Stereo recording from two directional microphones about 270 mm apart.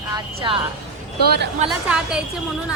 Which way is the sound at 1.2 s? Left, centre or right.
Right.